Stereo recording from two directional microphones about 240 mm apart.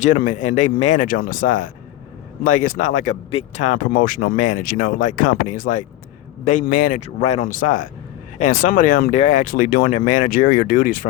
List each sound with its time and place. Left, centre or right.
0.0 s speech: left